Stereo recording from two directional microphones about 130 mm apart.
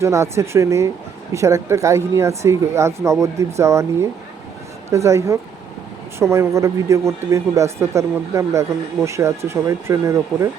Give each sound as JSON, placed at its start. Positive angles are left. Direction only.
{"t": 0.0, "sound": "speech", "side_deg": -20}
{"t": 4.9, "sound": "speech", "side_deg": -25}